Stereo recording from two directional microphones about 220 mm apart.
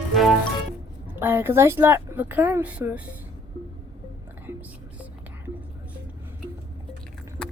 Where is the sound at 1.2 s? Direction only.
10° right (ahead or behind).